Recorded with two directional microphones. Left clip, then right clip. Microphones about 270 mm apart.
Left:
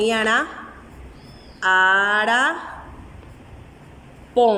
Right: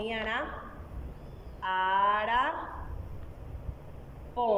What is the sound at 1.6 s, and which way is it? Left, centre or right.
Speech, left.